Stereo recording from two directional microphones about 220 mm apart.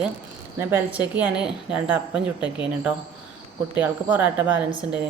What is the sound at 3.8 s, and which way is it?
Speech, 5° right (ahead or behind).